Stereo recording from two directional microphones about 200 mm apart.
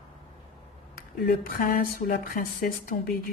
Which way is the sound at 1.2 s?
45° left (ahead or behind).